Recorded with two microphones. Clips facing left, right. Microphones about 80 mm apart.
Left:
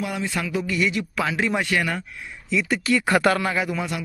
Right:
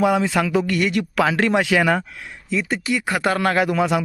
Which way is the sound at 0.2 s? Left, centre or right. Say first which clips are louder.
Right 7 dB; right.